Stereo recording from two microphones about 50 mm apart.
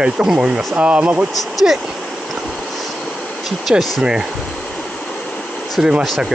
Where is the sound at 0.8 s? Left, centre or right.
Right.